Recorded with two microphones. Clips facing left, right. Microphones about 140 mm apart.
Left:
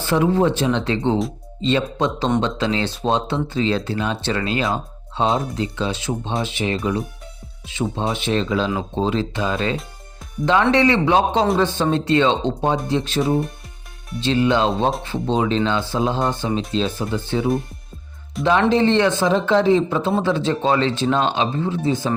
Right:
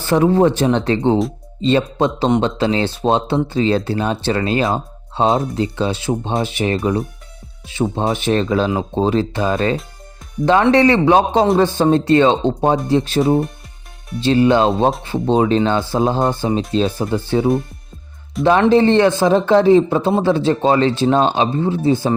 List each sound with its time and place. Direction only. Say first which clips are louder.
0.0 s speech: right 4 dB; 40° right (ahead or behind)
4.6 s music: right 4 dB; 25° right (ahead or behind)
5.3 s speech: right 4 dB; 35° right (ahead or behind)
6.4 s speech: right 4 dB; 45° right (ahead or behind)
8.1 s speech: right 4 dB; 50° right (ahead or behind)
14.3 s speech: right 5 dB; 40° right (ahead or behind)